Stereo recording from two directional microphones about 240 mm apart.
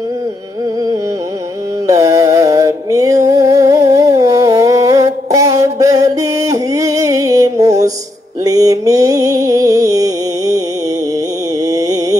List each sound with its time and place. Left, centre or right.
1.9 s music: centre
11.6 s mantra: centre